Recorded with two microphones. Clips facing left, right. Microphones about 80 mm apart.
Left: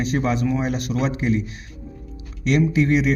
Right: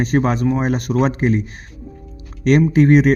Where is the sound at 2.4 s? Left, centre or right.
Right.